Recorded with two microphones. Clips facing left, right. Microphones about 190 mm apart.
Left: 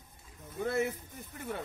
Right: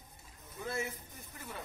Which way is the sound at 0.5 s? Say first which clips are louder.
Left 7 dB; 60° left (ahead or behind).